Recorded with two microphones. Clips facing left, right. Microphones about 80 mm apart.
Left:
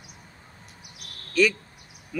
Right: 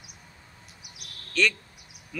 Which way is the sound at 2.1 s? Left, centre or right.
Centre.